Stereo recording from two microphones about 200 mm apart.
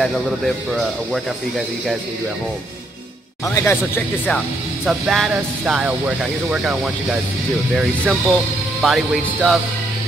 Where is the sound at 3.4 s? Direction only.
15° left (ahead or behind).